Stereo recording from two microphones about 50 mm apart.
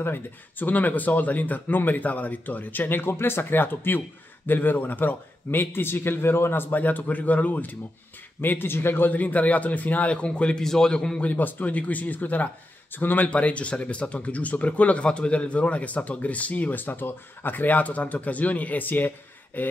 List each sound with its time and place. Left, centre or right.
0.0 s speech: left
8.4 s a man's voice: left
9.2 s speech: left
10.6 s a man's voice: centre
11.1 s speech: left
13.3 s speech: left